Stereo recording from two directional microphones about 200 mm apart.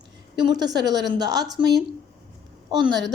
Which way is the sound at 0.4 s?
20° right (ahead or behind).